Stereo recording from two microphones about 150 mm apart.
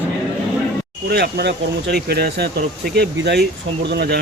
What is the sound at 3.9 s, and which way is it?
Speech, 90° right.